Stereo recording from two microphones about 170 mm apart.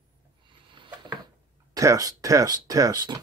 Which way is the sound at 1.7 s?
20° right (ahead or behind).